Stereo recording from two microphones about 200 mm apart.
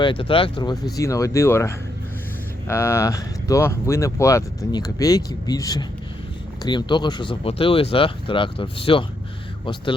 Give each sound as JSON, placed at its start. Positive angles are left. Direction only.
{"t": 0.0, "sound": "speech", "side_deg": 25}